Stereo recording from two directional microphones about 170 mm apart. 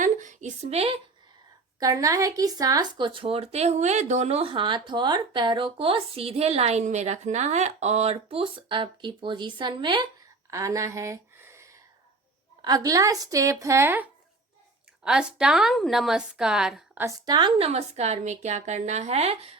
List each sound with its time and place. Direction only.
0.0 s a sound: 45° right (ahead or behind)
1.8 s speech: 20° right (ahead or behind)
10.5 s a sound: 20° right (ahead or behind)
12.6 s a woman's voice: 20° right (ahead or behind); by 17.0 s 5° right (ahead or behind)
17.0 s speech: 20° right (ahead or behind)
17.7 s speech: 40° right (ahead or behind)